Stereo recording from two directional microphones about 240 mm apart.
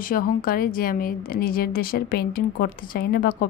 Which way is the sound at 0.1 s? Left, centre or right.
Left.